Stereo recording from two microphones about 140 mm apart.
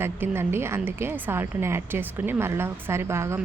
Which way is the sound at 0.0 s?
15° right (ahead or behind).